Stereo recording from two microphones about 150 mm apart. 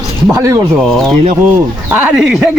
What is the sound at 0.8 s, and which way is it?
Speech, centre (ahead or behind).